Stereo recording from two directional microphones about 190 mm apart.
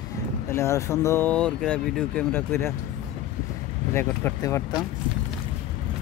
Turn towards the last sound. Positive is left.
turn(degrees=15)  # may be behind; listen again after turning